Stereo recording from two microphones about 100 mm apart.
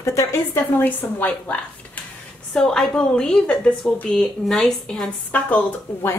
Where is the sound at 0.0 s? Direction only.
30° left (ahead or behind).